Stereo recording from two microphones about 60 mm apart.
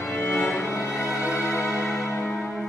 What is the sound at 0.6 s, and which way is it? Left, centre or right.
Music, left.